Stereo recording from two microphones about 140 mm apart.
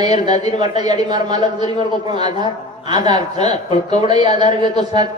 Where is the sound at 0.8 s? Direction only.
30° right (ahead or behind).